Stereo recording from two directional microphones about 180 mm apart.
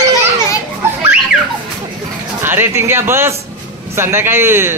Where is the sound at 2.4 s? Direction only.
10° right (ahead or behind).